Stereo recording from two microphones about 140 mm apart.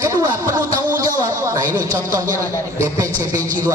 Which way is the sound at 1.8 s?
70° right (ahead or behind).